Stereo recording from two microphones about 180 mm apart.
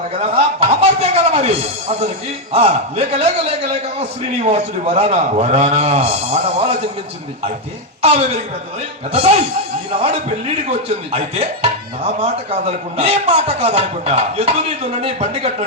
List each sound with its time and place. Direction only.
0.2 s a sound: 35° right (ahead or behind)
2.5 s speech: 35° right (ahead or behind)
4.4 s speech: 35° right (ahead or behind)
9.1 s speech: 30° right (ahead or behind)